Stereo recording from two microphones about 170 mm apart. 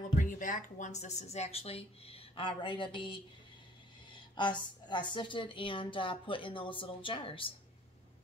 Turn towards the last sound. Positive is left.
turn(degrees=30)  # may be behind; listen again after turning